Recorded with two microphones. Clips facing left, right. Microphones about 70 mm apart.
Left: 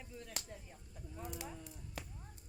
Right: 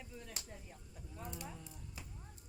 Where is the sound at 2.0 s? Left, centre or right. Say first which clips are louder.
Left 7 dB; left.